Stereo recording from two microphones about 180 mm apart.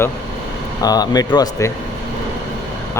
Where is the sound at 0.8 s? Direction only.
20° left (ahead or behind).